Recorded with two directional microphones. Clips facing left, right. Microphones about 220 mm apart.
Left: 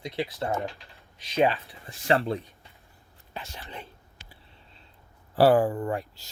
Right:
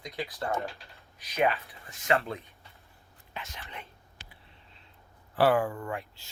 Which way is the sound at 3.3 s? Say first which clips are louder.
Left 3 dB; 30° left (ahead or behind).